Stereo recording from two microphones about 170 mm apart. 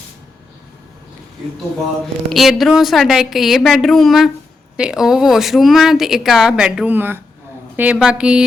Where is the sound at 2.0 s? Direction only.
Centre (ahead or behind).